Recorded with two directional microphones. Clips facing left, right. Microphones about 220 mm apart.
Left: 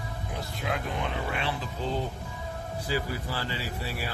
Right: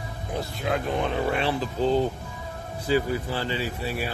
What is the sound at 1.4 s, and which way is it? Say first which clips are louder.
Speech: right 7 dB; 35° right (ahead or behind).